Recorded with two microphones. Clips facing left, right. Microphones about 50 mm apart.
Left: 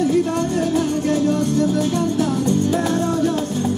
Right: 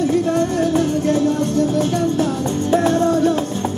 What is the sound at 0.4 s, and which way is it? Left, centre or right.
Music, right.